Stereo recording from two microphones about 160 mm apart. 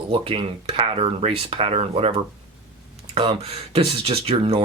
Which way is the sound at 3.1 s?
40° right (ahead or behind).